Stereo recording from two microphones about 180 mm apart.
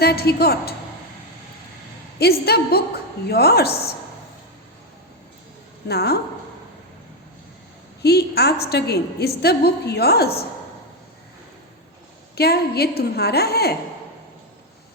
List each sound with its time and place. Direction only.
0.0 s a woman's voice: 60° left (ahead or behind)
2.1 s a woman's voice: 60° left (ahead or behind)
5.9 s a woman's voice: 65° left (ahead or behind)
8.0 s a woman's voice: 65° left (ahead or behind)
12.4 s a woman's voice: 60° left (ahead or behind)